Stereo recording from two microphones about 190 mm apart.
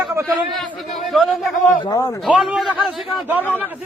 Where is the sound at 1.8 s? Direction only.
20° left (ahead or behind).